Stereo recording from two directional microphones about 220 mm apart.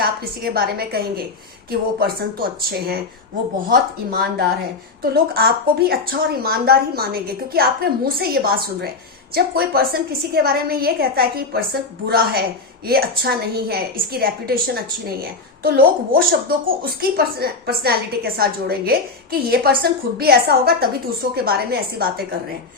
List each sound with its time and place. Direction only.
0.0 s a woman's voice: 45° right (ahead or behind)